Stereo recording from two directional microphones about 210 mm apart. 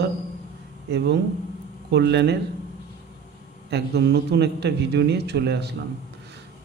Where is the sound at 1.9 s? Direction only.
55° right (ahead or behind).